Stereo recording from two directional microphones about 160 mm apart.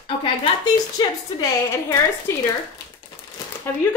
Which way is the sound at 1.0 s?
20° left (ahead or behind).